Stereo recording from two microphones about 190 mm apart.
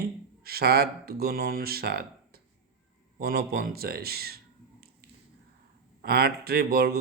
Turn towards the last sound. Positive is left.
turn(degrees=-55)  # may be behind; listen again after turning